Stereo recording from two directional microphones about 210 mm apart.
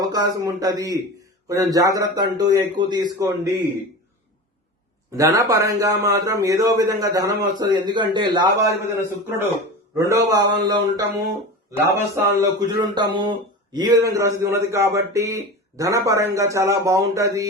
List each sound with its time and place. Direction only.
0.0 s a man's voice: 20° right (ahead or behind)
5.1 s a man's voice: 15° right (ahead or behind)
10.1 s a sound: 20° right (ahead or behind)
13.7 s a man's voice: 15° right (ahead or behind)